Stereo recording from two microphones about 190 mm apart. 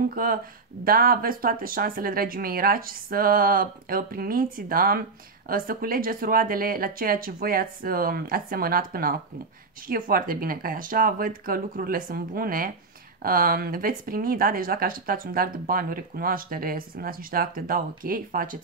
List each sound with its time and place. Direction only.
0.1 s speech: 50° right (ahead or behind)